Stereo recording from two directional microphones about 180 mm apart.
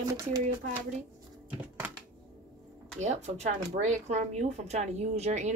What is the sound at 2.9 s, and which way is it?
Speech, 40° right (ahead or behind).